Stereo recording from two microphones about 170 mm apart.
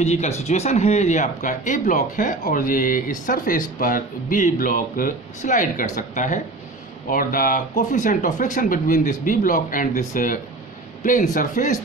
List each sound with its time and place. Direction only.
0.0 s speech: 40° left (ahead or behind)